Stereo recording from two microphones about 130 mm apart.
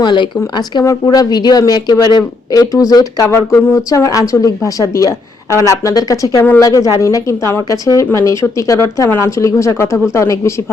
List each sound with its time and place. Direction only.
0.0 s speech: 35° left (ahead or behind)
6.4 s speech: 15° left (ahead or behind)